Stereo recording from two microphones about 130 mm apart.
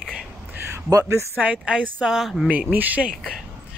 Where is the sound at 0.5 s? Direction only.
20° right (ahead or behind).